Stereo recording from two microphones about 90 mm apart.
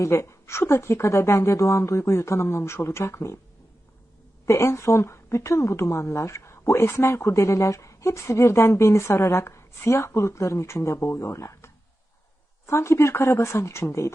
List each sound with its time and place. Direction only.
0.0 s a woman's voice: 30° left (ahead or behind)
4.4 s a woman's voice: 30° left (ahead or behind)